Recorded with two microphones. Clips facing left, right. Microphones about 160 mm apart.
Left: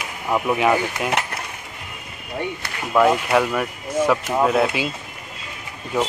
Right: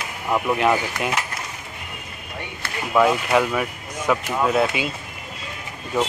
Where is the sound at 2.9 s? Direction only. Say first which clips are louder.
Left 1 dB; 5° right (ahead or behind).